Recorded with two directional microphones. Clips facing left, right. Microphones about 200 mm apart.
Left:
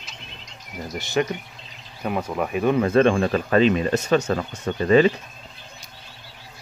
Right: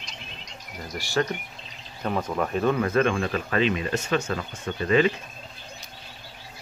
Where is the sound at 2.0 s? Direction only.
10° left (ahead or behind); by 5.1 s 35° left (ahead or behind).